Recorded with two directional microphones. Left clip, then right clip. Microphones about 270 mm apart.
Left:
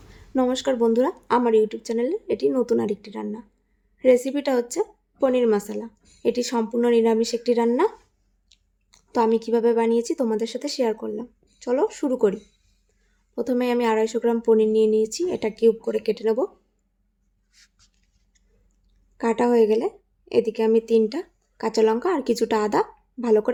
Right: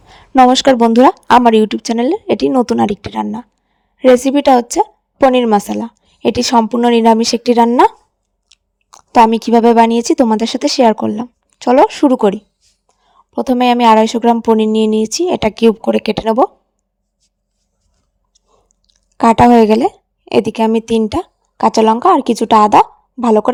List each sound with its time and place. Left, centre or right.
0.1 s a woman's voice: right
18.9 s a woman's voice: right